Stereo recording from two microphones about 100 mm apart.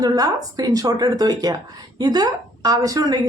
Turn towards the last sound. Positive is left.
turn(degrees=-40)  # may be behind; listen again after turning